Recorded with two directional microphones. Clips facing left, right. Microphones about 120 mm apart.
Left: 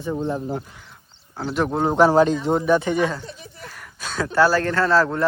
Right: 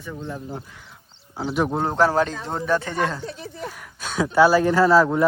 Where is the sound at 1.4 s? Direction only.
5° right (ahead or behind).